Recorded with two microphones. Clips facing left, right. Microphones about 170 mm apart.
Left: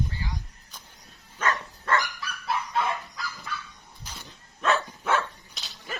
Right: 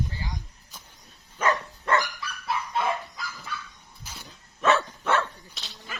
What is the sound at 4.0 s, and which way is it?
Dog, 10° right (ahead or behind).